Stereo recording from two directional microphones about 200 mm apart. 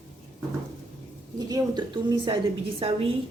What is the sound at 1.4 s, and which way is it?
A woman's voice, 20° right (ahead or behind).